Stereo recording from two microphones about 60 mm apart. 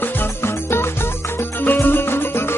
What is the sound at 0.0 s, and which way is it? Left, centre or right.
Music, left.